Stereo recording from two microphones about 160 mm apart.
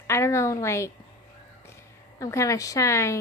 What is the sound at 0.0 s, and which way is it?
Speech, 15° left (ahead or behind).